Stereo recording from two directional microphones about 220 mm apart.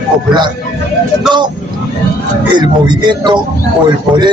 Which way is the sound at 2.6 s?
20° right (ahead or behind).